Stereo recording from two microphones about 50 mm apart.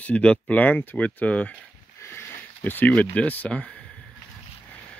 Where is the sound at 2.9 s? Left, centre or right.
Left.